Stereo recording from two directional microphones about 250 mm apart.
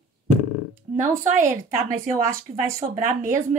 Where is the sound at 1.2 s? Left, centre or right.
Right.